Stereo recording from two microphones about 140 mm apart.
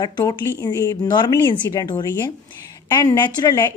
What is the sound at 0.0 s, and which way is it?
A woman's voice, 25° left (ahead or behind).